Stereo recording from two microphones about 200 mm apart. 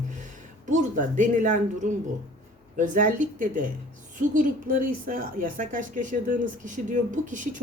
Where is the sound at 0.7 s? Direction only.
40° right (ahead or behind).